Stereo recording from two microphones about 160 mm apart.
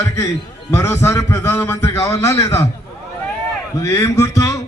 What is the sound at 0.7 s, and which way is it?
A man's voice, 15° left (ahead or behind).